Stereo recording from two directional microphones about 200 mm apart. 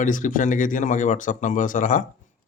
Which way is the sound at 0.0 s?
40° left (ahead or behind).